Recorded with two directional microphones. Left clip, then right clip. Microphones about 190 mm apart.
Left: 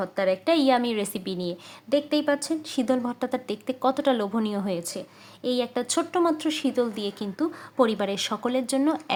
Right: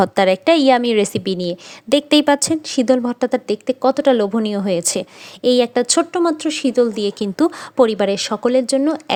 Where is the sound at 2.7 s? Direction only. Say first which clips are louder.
Right 10 dB; 30° right (ahead or behind).